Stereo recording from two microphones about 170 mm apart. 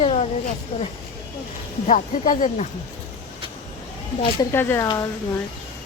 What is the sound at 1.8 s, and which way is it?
Speech, 45° left (ahead or behind).